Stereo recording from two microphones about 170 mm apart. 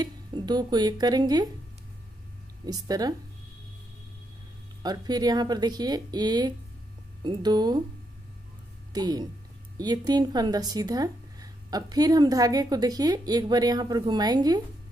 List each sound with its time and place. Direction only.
0.0 s speech: 25° right (ahead or behind)
2.6 s speech: 20° right (ahead or behind)
4.8 s speech: 25° right (ahead or behind)
8.9 s speech: 25° right (ahead or behind)